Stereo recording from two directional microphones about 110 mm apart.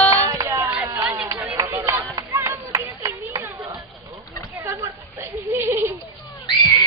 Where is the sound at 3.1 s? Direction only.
20° right (ahead or behind).